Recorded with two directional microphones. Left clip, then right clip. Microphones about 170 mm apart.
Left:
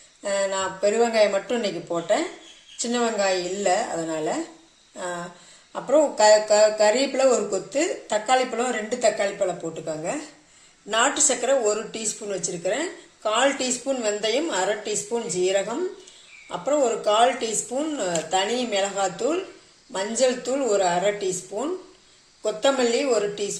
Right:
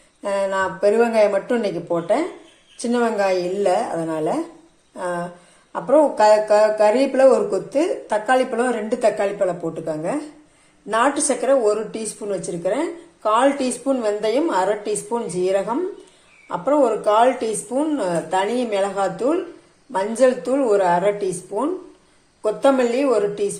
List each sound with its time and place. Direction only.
0.2 s speech: centre (ahead or behind)